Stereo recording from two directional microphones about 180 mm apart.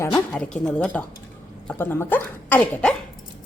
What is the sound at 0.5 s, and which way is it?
Speech, 5° left (ahead or behind).